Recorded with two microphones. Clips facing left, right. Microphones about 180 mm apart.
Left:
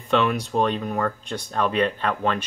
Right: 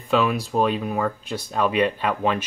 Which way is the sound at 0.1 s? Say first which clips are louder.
Even; 5° right (ahead or behind).